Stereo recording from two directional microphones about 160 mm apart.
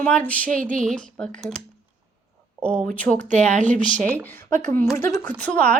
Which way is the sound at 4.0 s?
10° left (ahead or behind).